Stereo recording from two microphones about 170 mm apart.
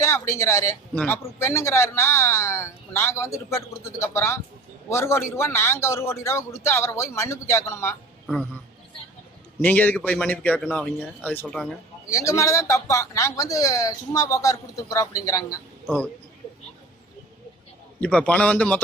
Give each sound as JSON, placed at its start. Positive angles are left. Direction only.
{"t": 0.0, "sound": "speech", "side_deg": 15}
{"t": 9.6, "sound": "speech", "side_deg": 10}
{"t": 12.1, "sound": "a man's voice", "side_deg": 15}
{"t": 18.0, "sound": "speech", "side_deg": 10}